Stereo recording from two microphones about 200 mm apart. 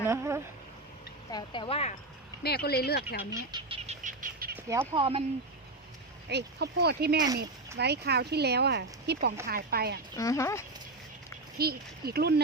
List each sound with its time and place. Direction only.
0.1 s speech: 15° right (ahead or behind)
1.3 s speech: 20° left (ahead or behind)
2.4 s speech: 50° left (ahead or behind)
3.5 s bird: 30° right (ahead or behind)
4.5 s a sound: 10° right (ahead or behind)
4.9 s speech: 30° right (ahead or behind)
6.2 s speech: 55° right (ahead or behind)
10.2 s speech: 15° left (ahead or behind)
11.5 s speech: 50° right (ahead or behind)